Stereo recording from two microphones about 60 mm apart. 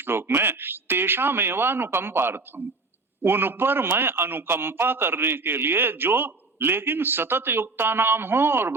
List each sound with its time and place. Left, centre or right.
0.0 s a man's voice: right